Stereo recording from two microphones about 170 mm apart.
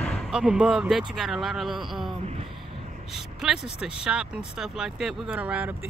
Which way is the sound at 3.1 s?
5° right (ahead or behind).